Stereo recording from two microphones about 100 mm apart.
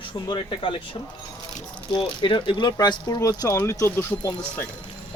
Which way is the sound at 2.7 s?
40° left (ahead or behind).